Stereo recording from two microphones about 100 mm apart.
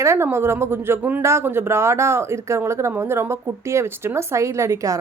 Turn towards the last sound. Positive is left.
turn(degrees=-30)  # may be behind; listen again after turning